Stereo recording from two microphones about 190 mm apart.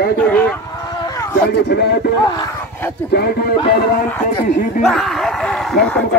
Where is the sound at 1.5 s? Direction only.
60° left (ahead or behind).